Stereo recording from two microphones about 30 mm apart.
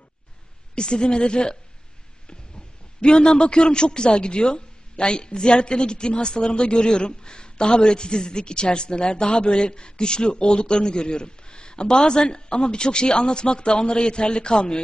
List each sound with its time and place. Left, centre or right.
0.7 s speech: left
3.0 s speech: left